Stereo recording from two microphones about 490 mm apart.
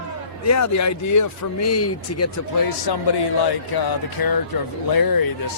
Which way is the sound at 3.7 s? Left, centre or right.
Left.